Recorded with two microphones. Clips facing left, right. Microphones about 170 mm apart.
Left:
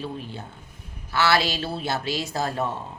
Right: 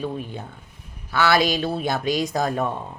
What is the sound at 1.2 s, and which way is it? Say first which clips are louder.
Speech: right 3 dB; 20° right (ahead or behind).